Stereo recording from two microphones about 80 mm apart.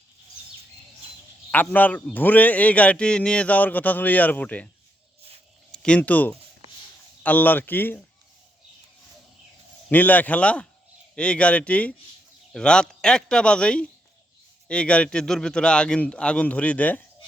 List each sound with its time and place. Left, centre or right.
1.5 s speech: left
5.7 s speech: centre
9.9 s a man's voice: left